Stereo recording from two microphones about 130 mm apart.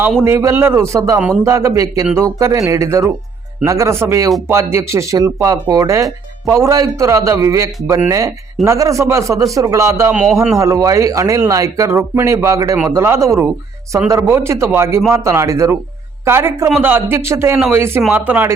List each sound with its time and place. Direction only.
0.3 s speech: 20° right (ahead or behind)